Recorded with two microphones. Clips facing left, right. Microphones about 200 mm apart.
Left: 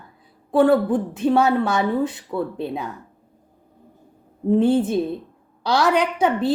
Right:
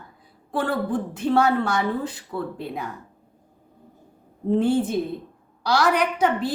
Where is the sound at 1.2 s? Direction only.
20° left (ahead or behind).